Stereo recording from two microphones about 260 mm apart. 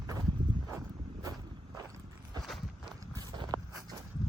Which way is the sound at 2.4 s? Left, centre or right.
Centre.